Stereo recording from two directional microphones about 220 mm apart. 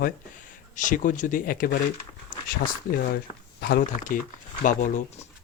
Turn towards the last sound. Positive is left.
turn(degrees=35)  # may be behind; listen again after turning